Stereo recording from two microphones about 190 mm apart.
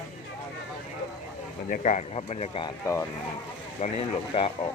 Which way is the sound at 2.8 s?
15° left (ahead or behind).